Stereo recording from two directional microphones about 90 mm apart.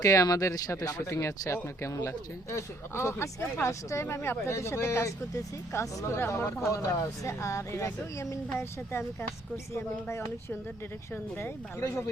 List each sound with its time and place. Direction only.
0.0 s speech: 35° left (ahead or behind)
1.0 s speech: 30° left (ahead or behind)